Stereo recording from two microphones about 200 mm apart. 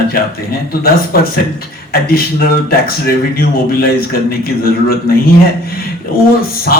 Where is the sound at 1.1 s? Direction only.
50° left (ahead or behind).